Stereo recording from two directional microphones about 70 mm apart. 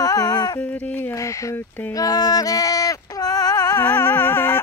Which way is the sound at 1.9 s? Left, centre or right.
Left.